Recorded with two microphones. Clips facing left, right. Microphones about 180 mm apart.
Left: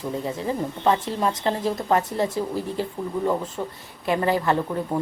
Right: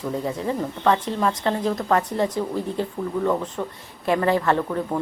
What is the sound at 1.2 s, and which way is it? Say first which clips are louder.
Speech: right 1 dB; 25° left (ahead or behind).